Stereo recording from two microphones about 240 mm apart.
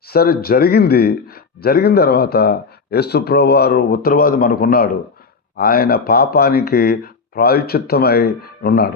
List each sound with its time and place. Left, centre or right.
0.1 s speech: left